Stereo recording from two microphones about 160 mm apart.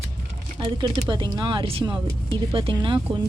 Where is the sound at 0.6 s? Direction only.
30° right (ahead or behind).